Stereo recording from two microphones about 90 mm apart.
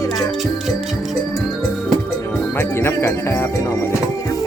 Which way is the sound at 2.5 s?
25° left (ahead or behind).